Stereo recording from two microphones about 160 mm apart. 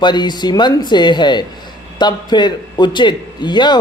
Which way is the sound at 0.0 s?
25° left (ahead or behind).